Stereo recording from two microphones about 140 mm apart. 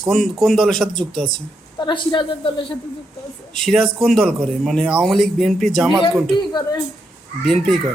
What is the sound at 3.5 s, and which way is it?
A man's voice, centre (ahead or behind).